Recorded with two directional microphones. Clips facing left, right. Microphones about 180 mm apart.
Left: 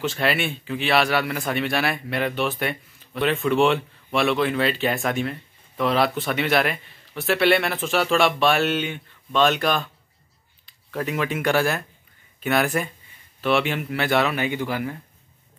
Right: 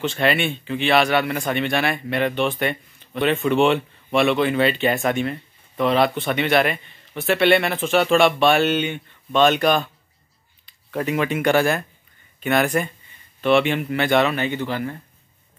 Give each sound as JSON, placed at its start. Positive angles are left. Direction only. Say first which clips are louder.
{"t": 0.0, "sound": "speech", "louder": "right 3 dB", "side_deg": 5}